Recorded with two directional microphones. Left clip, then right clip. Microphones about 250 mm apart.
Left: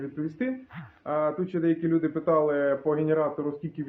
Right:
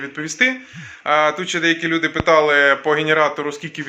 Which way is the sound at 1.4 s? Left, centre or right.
Centre.